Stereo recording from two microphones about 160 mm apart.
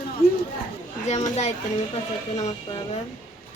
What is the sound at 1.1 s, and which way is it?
Speech, 45° left (ahead or behind).